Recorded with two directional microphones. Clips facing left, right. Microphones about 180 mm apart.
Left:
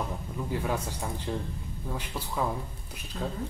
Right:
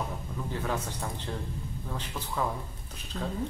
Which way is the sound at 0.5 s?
10° left (ahead or behind).